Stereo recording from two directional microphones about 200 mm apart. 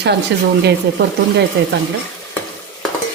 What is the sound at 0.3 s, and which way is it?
Speech, 60° right (ahead or behind).